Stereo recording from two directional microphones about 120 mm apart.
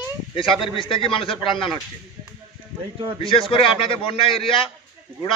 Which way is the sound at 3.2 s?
50° left (ahead or behind).